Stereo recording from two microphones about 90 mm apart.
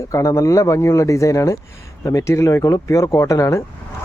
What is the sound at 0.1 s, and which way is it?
Speech, 35° left (ahead or behind).